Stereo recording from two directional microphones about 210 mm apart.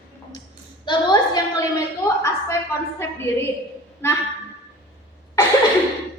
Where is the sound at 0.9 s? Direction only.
15° left (ahead or behind).